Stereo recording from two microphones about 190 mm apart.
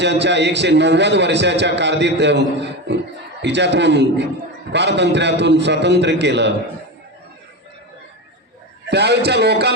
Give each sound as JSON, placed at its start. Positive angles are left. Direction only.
{"t": 0.0, "sound": "a man's voice", "side_deg": -65}
{"t": 8.9, "sound": "a man's voice", "side_deg": -60}